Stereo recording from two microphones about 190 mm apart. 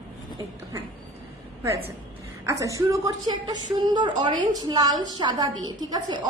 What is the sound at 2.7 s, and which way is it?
A woman's voice, 20° right (ahead or behind).